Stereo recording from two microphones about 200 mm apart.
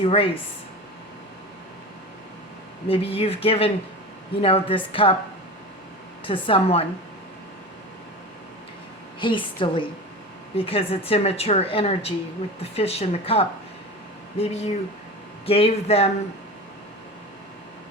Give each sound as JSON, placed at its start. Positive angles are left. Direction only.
{"t": 0.0, "sound": "speech", "side_deg": 30}
{"t": 2.8, "sound": "speech", "side_deg": 30}
{"t": 6.2, "sound": "speech", "side_deg": 25}
{"t": 9.2, "sound": "a woman's voice", "side_deg": 25}